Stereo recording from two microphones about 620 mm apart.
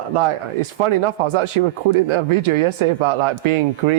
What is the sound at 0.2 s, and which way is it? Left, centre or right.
Speech, right.